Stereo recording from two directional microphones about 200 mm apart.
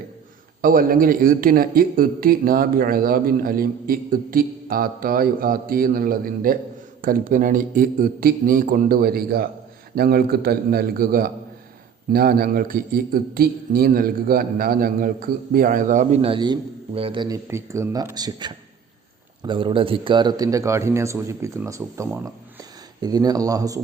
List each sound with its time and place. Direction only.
0.6 s a man's voice: 45° right (ahead or behind); by 23.8 s 15° right (ahead or behind)